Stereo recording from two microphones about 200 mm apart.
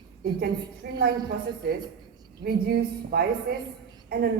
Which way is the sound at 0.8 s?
55° right (ahead or behind).